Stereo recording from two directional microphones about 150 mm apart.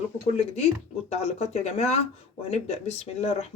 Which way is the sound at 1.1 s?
45° left (ahead or behind).